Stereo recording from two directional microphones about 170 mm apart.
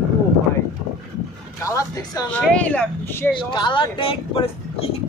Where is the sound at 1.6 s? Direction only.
20° left (ahead or behind).